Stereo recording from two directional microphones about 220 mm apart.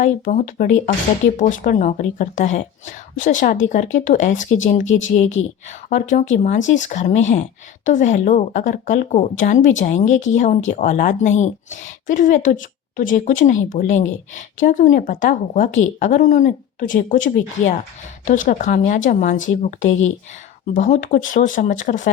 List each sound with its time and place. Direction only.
0.0 s a woman's voice: 35° left (ahead or behind)